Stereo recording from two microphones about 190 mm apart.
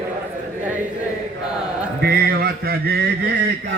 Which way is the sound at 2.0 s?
55° right (ahead or behind).